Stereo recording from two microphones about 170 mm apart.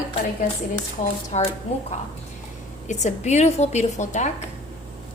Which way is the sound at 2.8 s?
40° left (ahead or behind).